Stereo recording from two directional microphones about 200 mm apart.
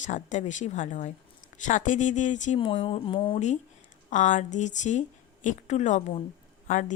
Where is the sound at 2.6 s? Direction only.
25° left (ahead or behind).